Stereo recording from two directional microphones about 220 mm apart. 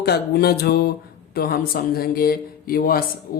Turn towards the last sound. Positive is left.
turn(degrees=40)  # may be behind; listen again after turning